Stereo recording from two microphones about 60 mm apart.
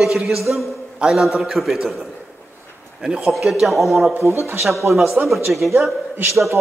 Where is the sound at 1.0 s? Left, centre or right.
Centre.